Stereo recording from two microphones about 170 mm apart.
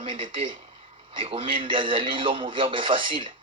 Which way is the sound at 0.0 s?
30° right (ahead or behind).